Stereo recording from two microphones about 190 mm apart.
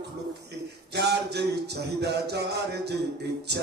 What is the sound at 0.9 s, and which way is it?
Music, 60° right (ahead or behind).